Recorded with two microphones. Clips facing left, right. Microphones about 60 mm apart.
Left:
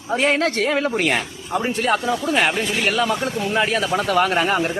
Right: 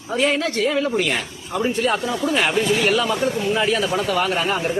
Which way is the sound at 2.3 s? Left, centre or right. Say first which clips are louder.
Right 2 dB; left.